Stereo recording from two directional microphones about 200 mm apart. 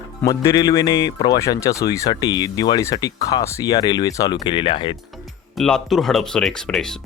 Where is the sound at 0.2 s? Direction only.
15° left (ahead or behind).